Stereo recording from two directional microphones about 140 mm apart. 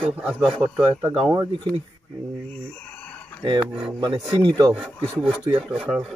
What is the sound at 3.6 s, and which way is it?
Speech, 10° right (ahead or behind).